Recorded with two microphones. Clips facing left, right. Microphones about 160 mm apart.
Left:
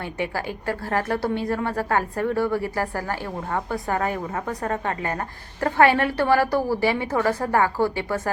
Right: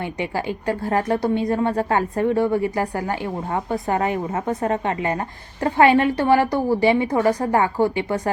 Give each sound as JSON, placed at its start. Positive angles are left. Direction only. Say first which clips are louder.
{"t": 0.6, "sound": "a woman's voice", "louder": "right 3 dB", "side_deg": -15}